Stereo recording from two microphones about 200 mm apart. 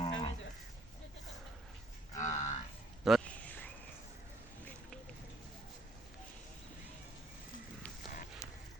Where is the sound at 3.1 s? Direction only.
5° left (ahead or behind).